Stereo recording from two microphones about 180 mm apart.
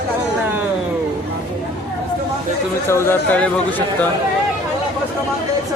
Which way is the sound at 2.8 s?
15° left (ahead or behind).